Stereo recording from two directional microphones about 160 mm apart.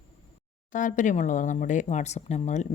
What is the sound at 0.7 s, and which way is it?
Speech, 55° left (ahead or behind).